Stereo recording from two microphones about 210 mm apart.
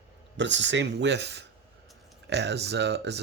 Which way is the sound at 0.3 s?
60° right (ahead or behind).